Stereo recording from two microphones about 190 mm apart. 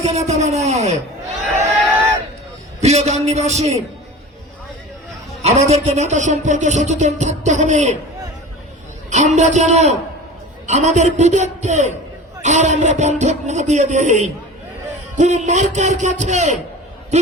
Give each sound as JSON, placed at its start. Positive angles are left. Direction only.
{"t": 0.0, "sound": "a man's voice", "side_deg": -35}
{"t": 2.8, "sound": "a man's voice", "side_deg": -35}
{"t": 5.4, "sound": "a man's voice", "side_deg": -35}
{"t": 9.0, "sound": "a man's voice", "side_deg": -40}